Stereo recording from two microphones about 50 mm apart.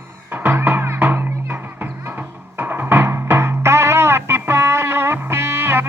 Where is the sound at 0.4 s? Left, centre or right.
Right.